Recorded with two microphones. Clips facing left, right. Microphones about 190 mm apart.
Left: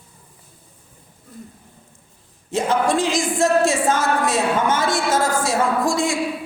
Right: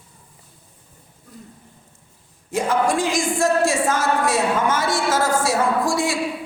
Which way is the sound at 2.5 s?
20° left (ahead or behind).